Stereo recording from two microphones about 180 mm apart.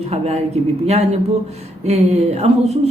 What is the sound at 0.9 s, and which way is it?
Speech, 35° right (ahead or behind).